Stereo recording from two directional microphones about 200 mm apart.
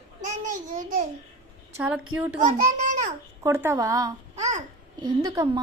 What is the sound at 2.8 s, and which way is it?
Babbling, 35° right (ahead or behind).